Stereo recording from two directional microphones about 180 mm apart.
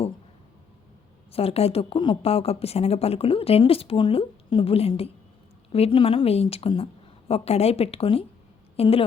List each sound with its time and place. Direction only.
1.3 s a woman's voice: 35° left (ahead or behind)